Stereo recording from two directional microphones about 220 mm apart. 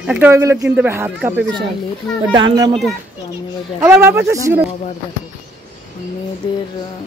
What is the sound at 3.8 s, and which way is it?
Speech, 15° right (ahead or behind).